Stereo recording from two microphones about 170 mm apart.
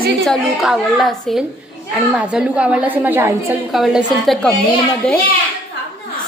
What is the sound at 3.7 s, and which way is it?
Speech, centre (ahead or behind).